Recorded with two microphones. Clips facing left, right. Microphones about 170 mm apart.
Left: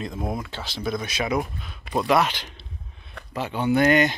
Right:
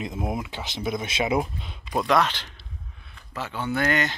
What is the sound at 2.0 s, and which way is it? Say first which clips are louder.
Speech: left 1 dB; 10° left (ahead or behind).